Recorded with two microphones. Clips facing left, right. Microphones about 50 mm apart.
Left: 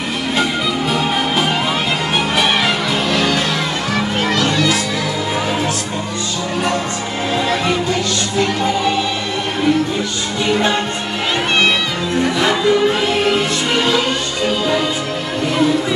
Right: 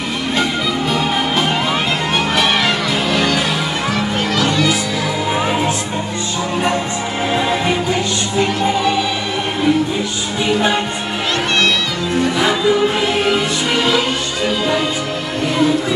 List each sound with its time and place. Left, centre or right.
0.9 s music: centre
4.3 s music: centre
5.3 s music: centre
7.3 s music: centre
12.4 s music: centre